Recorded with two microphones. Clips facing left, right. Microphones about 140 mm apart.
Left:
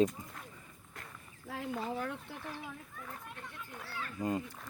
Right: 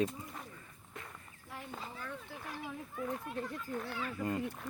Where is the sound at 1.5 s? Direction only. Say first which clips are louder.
Left 8 dB; 90° left.